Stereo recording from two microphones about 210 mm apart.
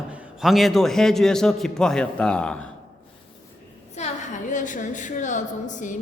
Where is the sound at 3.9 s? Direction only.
35° left (ahead or behind).